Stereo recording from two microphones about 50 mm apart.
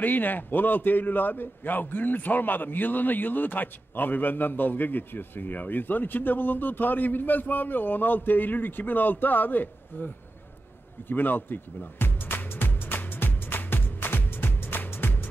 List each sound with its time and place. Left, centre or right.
0.0 s a man's voice: left
11.1 s music: left